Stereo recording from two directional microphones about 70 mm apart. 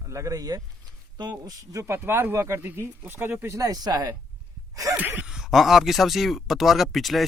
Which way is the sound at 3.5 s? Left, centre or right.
Right.